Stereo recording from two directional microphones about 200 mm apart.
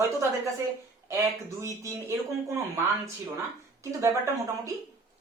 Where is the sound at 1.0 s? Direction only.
15° right (ahead or behind).